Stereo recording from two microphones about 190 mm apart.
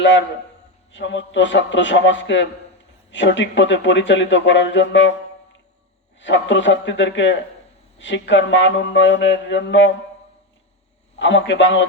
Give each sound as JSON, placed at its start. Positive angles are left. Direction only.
{"t": 0.0, "sound": "speech", "side_deg": 70}
{"t": 6.1, "sound": "speech", "side_deg": 70}
{"t": 11.2, "sound": "speech", "side_deg": 70}